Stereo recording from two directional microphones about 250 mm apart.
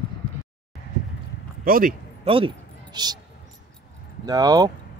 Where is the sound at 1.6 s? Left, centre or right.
Right.